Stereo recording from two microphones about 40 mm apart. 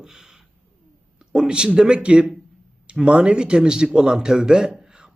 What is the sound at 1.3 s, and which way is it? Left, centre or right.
A man's voice, centre.